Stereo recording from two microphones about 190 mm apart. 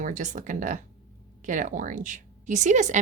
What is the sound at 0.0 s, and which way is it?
Speech, 40° right (ahead or behind).